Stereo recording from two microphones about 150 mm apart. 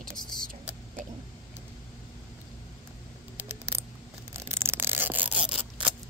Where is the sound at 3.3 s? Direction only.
15° right (ahead or behind).